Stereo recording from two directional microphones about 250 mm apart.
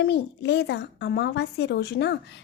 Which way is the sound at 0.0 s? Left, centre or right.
Left.